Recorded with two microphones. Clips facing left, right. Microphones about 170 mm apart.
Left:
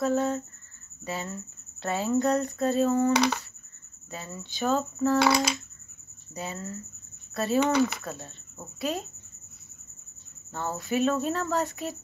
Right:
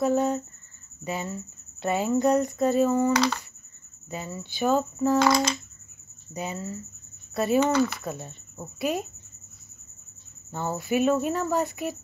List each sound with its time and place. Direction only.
0.0 s speech: 15° right (ahead or behind)
3.1 s a sound: 15° left (ahead or behind)
4.1 s speech: 15° right (ahead or behind)
5.2 s a sound: 10° left (ahead or behind)
6.3 s speech: 15° right (ahead or behind)
10.5 s speech: 15° right (ahead or behind)